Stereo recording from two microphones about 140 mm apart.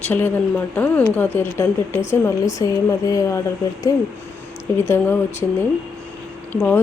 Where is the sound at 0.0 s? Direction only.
15° left (ahead or behind).